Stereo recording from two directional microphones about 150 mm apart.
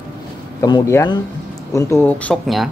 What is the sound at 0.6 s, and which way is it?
Speech, 25° left (ahead or behind).